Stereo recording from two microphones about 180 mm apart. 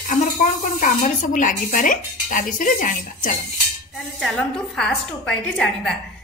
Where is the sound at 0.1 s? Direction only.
50° left (ahead or behind).